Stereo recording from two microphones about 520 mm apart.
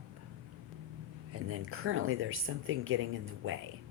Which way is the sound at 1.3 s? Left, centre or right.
Right.